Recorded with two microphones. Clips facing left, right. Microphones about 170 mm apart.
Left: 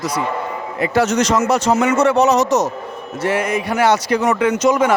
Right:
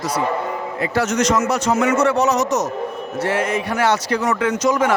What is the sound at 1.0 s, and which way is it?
Speech, 30° left (ahead or behind).